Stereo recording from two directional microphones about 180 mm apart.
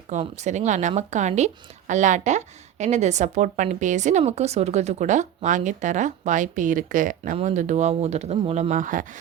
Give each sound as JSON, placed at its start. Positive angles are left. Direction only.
{"t": 0.1, "sound": "a woman's voice", "side_deg": -40}
{"t": 8.7, "sound": "speech", "side_deg": -45}